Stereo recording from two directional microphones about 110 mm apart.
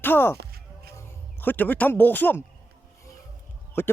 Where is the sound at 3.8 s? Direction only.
20° left (ahead or behind).